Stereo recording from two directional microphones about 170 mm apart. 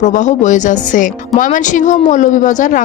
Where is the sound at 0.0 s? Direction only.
45° left (ahead or behind).